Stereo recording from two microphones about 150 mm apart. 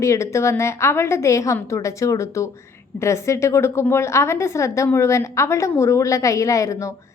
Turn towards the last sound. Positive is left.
turn(degrees=20)  # may be behind; listen again after turning